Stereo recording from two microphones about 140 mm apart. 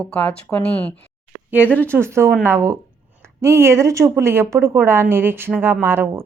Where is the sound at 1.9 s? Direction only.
20° right (ahead or behind).